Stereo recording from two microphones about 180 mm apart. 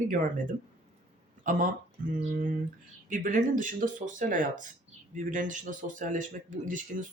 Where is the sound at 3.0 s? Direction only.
45° right (ahead or behind).